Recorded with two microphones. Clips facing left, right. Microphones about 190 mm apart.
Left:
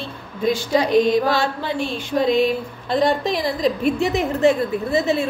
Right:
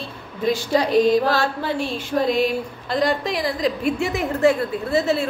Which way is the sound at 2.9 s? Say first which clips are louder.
Left 3 dB; 25° left (ahead or behind).